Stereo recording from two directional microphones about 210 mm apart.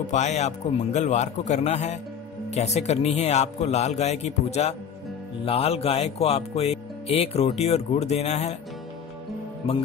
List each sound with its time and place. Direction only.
0.0 s a man's voice: 35° left (ahead or behind)